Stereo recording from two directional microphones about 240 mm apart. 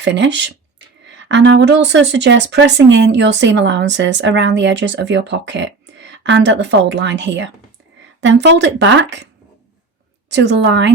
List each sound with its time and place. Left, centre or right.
0.0 s speech: right
10.2 s speech: right